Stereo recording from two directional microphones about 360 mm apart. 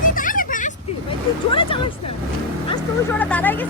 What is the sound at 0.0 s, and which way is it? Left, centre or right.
Vehicle, left.